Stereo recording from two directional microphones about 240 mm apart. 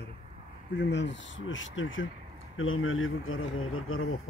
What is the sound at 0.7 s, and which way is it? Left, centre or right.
Speech, left.